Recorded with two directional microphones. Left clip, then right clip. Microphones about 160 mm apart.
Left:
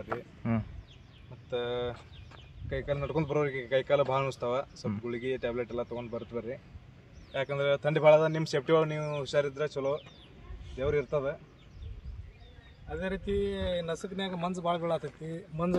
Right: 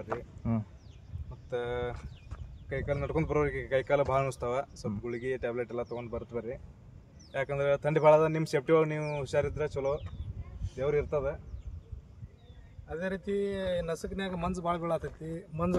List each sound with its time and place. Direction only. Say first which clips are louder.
0.1 s speech: left 1 dB; 5° left (ahead or behind)
1.5 s speech: left 1 dB; 20° right (ahead or behind)
7.3 s speech: even; 25° right (ahead or behind)
10.8 s speech: even; 10° right (ahead or behind)
12.9 s speech: even; 15° left (ahead or behind); by 15.7 s centre (ahead or behind)